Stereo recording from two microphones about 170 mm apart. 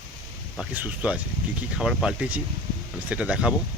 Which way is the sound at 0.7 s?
10° right (ahead or behind).